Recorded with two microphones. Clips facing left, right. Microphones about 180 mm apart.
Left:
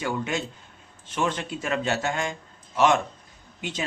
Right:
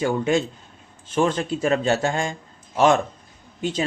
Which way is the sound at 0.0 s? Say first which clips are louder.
Right 7 dB; 30° right (ahead or behind).